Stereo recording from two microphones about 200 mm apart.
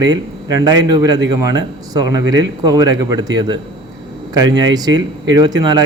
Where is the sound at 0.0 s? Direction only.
20° right (ahead or behind).